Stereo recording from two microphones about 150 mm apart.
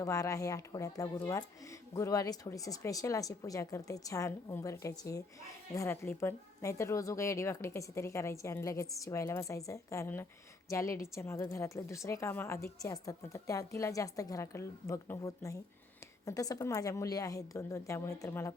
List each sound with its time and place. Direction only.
0.0 s speech: 20° left (ahead or behind)